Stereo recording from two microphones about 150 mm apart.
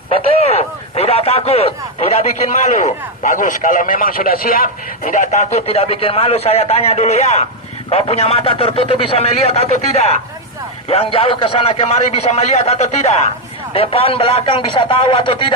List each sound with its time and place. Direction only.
0.1 s a man's voice: 45° left (ahead or behind)